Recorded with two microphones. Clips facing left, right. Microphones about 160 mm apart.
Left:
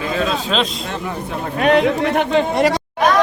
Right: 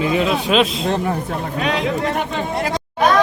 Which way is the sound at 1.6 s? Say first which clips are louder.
Left 7 dB; 60° left (ahead or behind).